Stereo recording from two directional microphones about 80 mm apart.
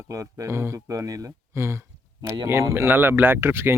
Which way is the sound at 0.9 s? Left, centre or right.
Right.